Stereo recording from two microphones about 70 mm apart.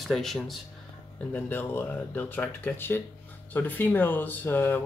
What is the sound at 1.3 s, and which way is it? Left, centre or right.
Speech, left.